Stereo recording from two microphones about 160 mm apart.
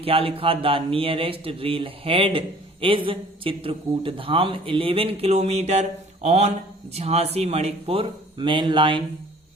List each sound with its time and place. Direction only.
0.0 s speech: 35° right (ahead or behind)